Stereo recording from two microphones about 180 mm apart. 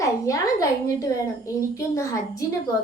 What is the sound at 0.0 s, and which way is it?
A woman's voice, 20° left (ahead or behind).